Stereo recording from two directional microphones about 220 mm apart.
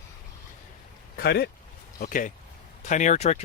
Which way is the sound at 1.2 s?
50° left (ahead or behind).